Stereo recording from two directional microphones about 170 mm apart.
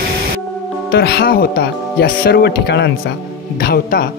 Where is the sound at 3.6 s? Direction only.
65° left (ahead or behind).